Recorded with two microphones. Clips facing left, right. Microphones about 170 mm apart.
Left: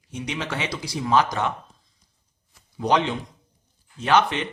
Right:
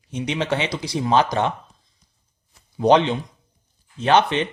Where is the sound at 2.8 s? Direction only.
25° right (ahead or behind).